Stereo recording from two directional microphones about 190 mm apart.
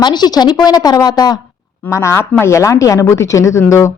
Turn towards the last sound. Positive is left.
turn(degrees=15)  # may be behind; listen again after turning